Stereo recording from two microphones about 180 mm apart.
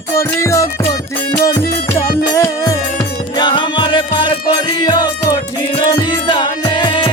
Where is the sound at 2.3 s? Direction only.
15° left (ahead or behind).